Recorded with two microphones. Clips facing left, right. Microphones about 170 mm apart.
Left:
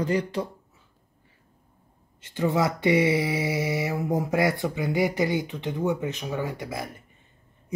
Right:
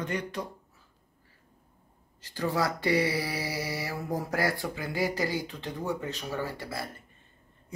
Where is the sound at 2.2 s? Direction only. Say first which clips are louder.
Left 5 dB; 20° left (ahead or behind).